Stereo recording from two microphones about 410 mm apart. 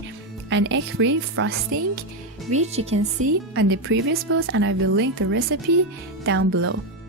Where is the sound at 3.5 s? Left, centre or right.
Right.